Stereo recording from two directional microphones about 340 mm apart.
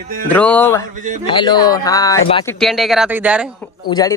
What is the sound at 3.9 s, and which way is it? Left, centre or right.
Speech, centre.